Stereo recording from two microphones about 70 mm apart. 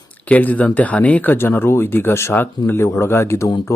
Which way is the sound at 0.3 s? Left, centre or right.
Left.